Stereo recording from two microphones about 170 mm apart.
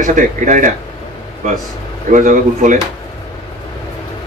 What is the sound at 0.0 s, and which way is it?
Speech, 50° right (ahead or behind).